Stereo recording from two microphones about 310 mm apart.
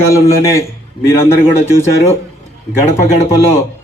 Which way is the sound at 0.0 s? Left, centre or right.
Centre.